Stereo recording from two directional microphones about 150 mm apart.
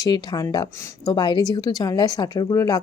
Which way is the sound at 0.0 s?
30° left (ahead or behind).